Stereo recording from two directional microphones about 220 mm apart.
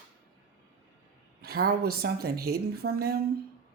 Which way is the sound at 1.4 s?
45° right (ahead or behind).